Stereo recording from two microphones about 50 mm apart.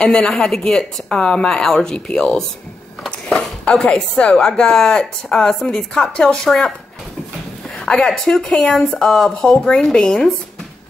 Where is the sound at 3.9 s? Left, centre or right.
Centre.